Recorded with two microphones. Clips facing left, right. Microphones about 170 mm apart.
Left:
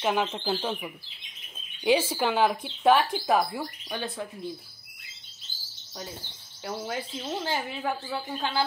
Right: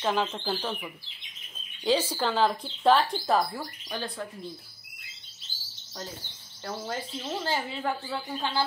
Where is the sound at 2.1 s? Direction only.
10° left (ahead or behind).